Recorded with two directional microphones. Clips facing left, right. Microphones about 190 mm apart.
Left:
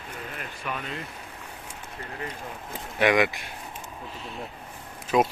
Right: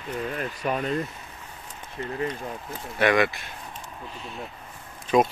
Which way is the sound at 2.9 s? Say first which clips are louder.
Even; 15° left (ahead or behind).